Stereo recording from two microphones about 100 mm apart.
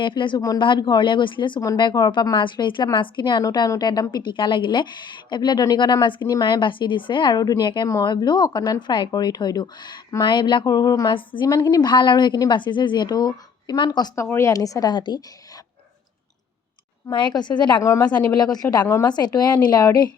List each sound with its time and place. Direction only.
0.0 s a woman's voice: 55° left (ahead or behind)
4.1 s a woman's voice: 55° left (ahead or behind)
11.1 s a woman's voice: 55° left (ahead or behind)
14.2 s a woman's voice: 25° left (ahead or behind); by 15.2 s 45° left (ahead or behind)
17.1 s a woman's voice: 50° left (ahead or behind)